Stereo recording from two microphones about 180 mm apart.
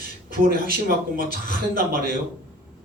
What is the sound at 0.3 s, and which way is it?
A man's voice, 55° right (ahead or behind).